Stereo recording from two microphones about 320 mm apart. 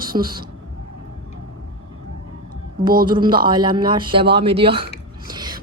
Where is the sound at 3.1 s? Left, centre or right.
Centre.